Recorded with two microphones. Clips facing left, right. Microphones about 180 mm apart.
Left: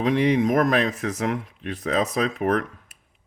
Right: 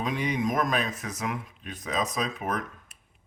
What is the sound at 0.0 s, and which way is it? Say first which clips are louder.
Speech: left 8 dB; 70° left (ahead or behind).